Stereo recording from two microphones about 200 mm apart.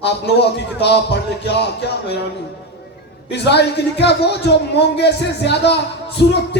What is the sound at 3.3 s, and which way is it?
Speech, 55° left (ahead or behind).